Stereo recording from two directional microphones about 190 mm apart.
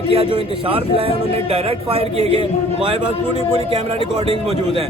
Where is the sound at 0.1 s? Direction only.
30° right (ahead or behind).